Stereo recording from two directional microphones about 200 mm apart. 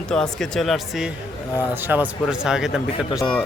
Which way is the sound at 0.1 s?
5° left (ahead or behind).